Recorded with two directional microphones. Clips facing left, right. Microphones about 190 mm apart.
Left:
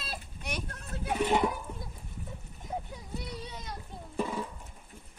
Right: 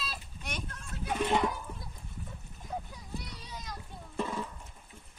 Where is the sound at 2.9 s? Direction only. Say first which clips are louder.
Left 3 dB; 25° left (ahead or behind).